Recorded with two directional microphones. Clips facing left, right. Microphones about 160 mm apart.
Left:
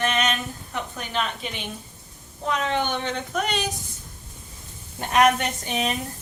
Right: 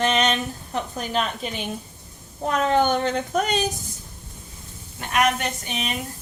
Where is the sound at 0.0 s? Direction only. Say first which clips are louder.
Right 3 dB; 30° right (ahead or behind).